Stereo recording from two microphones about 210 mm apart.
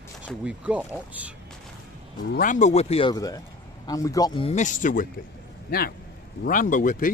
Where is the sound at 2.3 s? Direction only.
40° left (ahead or behind).